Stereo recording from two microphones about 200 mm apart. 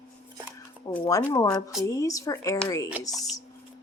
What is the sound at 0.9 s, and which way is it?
Speech, 10° left (ahead or behind).